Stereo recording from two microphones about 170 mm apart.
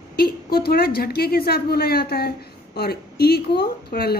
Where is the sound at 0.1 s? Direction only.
65° left (ahead or behind).